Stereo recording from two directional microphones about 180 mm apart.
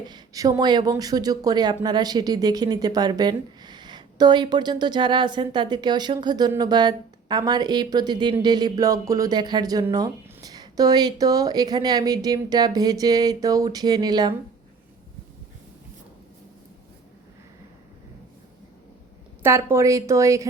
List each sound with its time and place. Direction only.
0.0 s speech: 20° right (ahead or behind)
19.4 s a woman's voice: 15° right (ahead or behind)